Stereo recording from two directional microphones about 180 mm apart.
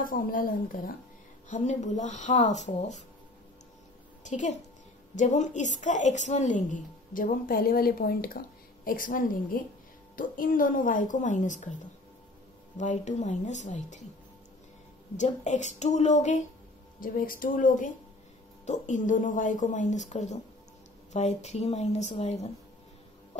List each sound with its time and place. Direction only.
0.0 s a woman's voice: 50° left (ahead or behind)
4.2 s a woman's voice: 40° left (ahead or behind)
12.7 s speech: 40° left (ahead or behind)
15.1 s speech: 40° left (ahead or behind)
17.0 s a woman's voice: 50° left (ahead or behind)